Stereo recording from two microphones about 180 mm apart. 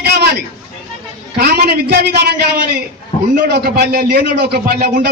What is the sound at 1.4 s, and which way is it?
A man's voice, 60° right (ahead or behind).